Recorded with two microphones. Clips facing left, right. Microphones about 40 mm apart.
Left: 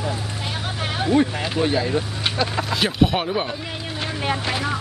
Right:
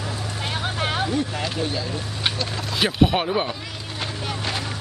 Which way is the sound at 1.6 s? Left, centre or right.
Left.